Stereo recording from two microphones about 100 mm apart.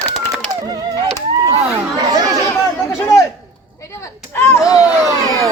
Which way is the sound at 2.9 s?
35° left (ahead or behind).